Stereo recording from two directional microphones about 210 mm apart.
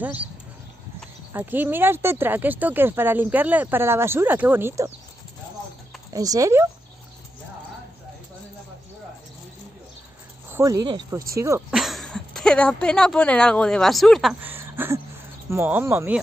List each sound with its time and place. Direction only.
0.0 s speech: 5° right (ahead or behind)
1.3 s speech: 10° right (ahead or behind)
6.1 s speech: 15° right (ahead or behind)
10.5 s speech: 15° right (ahead or behind)
11.7 s speech: centre (ahead or behind)